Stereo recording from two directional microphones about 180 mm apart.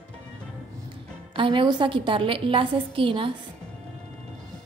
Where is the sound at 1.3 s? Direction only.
30° right (ahead or behind).